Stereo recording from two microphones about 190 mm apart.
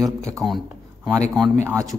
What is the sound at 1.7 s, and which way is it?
Speech, 15° right (ahead or behind).